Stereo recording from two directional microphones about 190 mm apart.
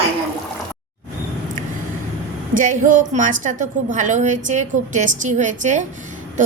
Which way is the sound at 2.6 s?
45° right (ahead or behind).